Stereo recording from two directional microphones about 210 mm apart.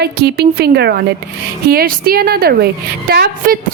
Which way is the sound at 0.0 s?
50° right (ahead or behind).